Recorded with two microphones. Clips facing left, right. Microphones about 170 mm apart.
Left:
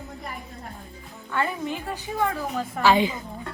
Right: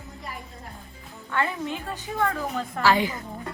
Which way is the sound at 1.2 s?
5° left (ahead or behind).